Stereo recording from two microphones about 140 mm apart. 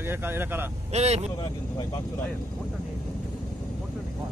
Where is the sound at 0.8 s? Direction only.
50° right (ahead or behind).